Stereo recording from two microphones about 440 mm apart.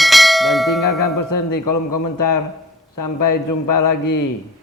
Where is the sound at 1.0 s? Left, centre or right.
Left.